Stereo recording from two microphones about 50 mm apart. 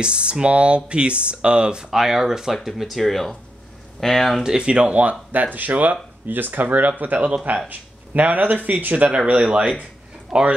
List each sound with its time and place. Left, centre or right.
0.0 s speech: right
1.9 s speech: centre
4.4 s speech: centre